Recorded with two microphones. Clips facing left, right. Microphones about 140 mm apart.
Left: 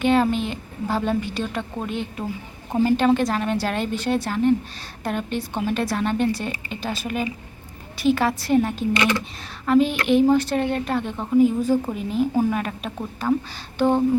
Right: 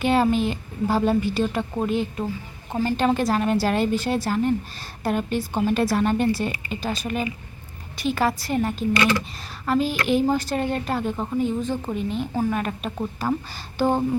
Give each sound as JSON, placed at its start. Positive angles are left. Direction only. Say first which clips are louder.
{"t": 0.0, "sound": "speech", "louder": "even", "side_deg": -5}
{"t": 8.9, "sound": "speech", "louder": "even", "side_deg": 20}
{"t": 9.6, "sound": "speech", "louder": "left 4 dB", "side_deg": 0}
{"t": 11.3, "sound": "speech", "louder": "left 9 dB", "side_deg": 10}